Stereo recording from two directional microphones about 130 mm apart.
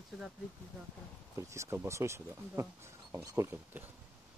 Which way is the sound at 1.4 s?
20° right (ahead or behind).